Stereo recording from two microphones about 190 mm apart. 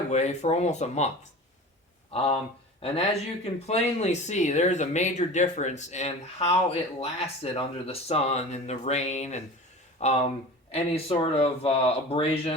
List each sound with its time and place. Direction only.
0.1 s speech: 35° left (ahead or behind)